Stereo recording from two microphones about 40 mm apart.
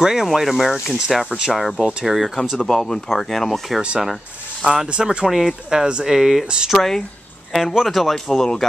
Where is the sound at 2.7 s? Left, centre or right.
Centre.